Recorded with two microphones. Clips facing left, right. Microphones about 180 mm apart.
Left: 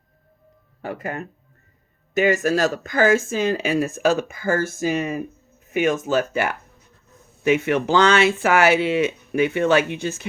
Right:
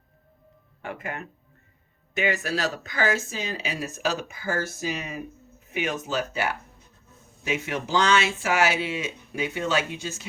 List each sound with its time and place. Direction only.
0.8 s speech: 40° left (ahead or behind); by 10.2 s 60° left (ahead or behind)